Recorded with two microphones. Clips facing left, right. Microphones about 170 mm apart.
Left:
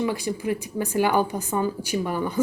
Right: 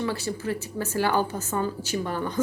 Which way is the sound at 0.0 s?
15° left (ahead or behind).